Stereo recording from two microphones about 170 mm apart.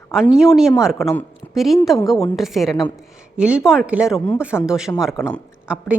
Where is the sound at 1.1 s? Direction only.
15° left (ahead or behind).